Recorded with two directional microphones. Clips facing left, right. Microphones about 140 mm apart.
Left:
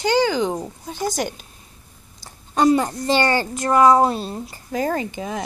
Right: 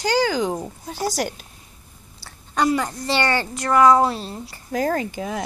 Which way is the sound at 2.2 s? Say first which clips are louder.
Left 4 dB; 25° left (ahead or behind).